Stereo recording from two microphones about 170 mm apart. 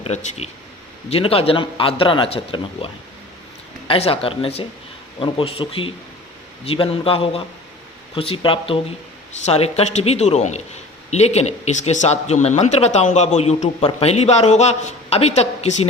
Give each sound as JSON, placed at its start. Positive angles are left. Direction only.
{"t": 0.0, "sound": "speech", "side_deg": 40}